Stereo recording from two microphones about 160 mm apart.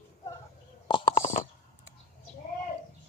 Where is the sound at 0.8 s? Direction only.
30° left (ahead or behind).